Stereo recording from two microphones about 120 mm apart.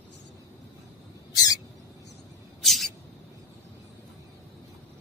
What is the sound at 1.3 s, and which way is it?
Rodents, 30° left (ahead or behind).